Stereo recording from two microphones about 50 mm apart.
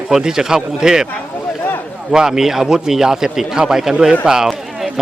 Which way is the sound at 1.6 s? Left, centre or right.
Left.